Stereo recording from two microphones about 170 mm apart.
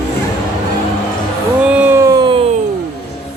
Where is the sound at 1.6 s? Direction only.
10° right (ahead or behind); by 2.5 s 30° right (ahead or behind).